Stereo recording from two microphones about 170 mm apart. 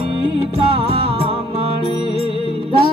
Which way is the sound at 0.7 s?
35° right (ahead or behind).